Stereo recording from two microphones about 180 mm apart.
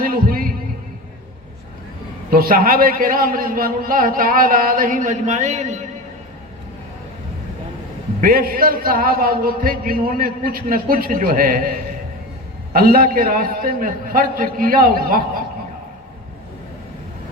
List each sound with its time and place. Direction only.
0.0 s heart sounds: 50° right (ahead or behind)
2.3 s a man's voice: 50° right (ahead or behind)
8.2 s a man's voice: 55° right (ahead or behind)